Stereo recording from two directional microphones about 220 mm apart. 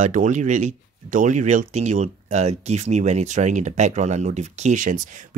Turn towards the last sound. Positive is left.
turn(degrees=-35)  # may be behind; listen again after turning